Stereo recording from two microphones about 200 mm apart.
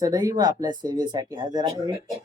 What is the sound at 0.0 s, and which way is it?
Speech, 20° right (ahead or behind).